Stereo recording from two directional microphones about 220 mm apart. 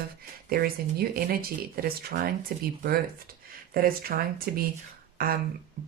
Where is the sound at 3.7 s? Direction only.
40° right (ahead or behind).